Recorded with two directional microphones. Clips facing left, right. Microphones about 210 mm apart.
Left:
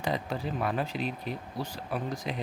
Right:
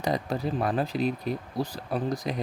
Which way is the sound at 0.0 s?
40° right (ahead or behind).